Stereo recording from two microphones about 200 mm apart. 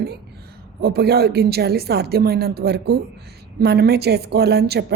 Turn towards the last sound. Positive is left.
turn(degrees=-55)  # may be behind; listen again after turning